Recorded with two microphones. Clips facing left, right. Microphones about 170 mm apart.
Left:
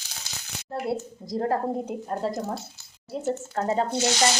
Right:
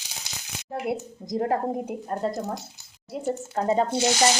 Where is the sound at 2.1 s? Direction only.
Centre (ahead or behind).